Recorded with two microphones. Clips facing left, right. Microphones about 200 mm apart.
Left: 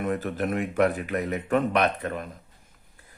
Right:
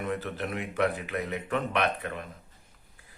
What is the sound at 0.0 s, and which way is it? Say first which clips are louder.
A man's voice: left 5 dB; 45° left (ahead or behind).